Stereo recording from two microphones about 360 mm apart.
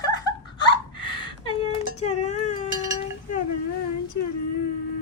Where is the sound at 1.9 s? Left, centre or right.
Centre.